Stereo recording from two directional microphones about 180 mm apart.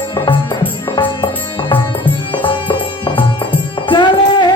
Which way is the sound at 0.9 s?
25° left (ahead or behind).